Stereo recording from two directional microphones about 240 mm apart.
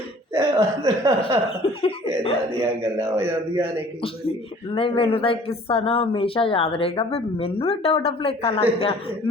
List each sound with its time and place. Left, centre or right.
0.3 s speech: centre
1.5 s speech: left
3.0 s speech: centre
4.0 s speech: left